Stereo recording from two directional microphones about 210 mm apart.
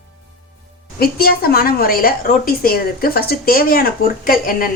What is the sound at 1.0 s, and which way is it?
A woman's voice, 45° left (ahead or behind).